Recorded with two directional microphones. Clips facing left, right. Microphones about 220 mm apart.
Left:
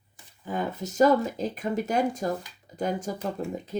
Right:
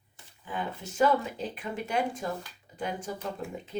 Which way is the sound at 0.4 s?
40° left (ahead or behind).